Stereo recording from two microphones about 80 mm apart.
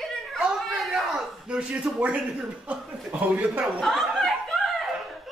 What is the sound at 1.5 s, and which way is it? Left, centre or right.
A man's voice, centre.